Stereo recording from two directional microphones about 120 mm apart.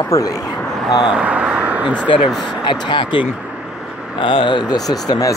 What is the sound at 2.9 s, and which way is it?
Speech, 40° left (ahead or behind).